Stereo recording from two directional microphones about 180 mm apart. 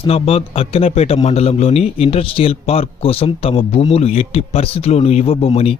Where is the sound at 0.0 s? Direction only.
35° left (ahead or behind).